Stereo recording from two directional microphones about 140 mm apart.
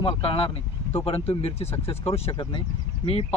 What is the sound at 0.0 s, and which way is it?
Speech, 40° left (ahead or behind).